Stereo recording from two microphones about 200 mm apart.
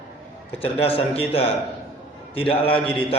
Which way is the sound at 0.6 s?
30° left (ahead or behind).